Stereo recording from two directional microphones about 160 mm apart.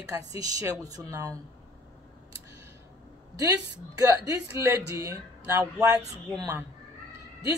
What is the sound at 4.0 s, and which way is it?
Speech, 20° right (ahead or behind).